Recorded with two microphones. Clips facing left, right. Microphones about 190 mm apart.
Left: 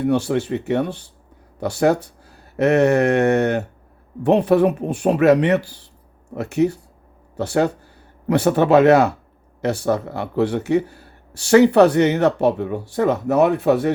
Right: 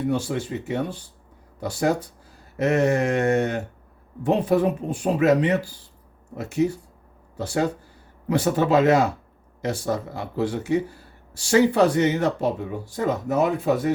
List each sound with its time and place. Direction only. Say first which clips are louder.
0.0 s speech: left 6 dB; 70° left (ahead or behind)